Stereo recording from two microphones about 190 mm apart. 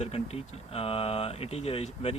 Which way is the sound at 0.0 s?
30° left (ahead or behind).